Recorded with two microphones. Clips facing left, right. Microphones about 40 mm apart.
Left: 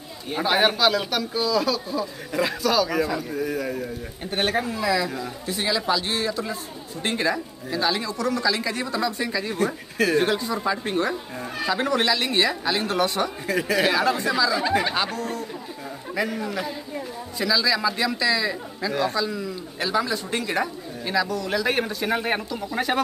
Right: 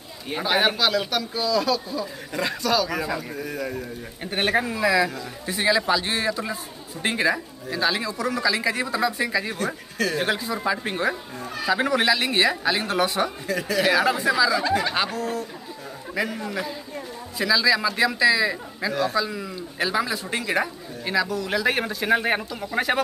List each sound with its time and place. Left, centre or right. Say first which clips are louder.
0.4 s speech: left 1 dB; centre
4.2 s a man's voice: right 2 dB; centre
13.5 s speech: left 2 dB; centre
13.9 s a man's voice: right 2 dB; centre
14.6 s speech: left 1 dB; centre
15.0 s a man's voice: right 1 dB; centre